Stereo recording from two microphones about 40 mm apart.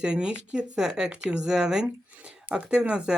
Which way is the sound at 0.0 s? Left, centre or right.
Right.